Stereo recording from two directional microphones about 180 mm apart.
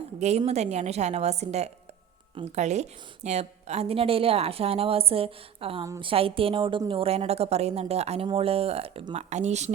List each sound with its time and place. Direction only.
0.2 s a woman's voice: 35° right (ahead or behind)